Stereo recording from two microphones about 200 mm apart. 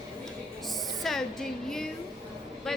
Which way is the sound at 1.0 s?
Centre (ahead or behind).